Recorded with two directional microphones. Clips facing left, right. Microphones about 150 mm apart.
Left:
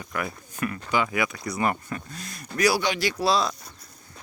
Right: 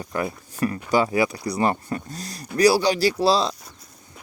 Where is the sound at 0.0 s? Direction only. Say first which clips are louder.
Right 5 dB; 30° right (ahead or behind).